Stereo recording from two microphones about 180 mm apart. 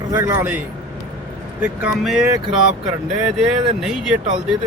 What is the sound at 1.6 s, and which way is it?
Speech, 5° right (ahead or behind).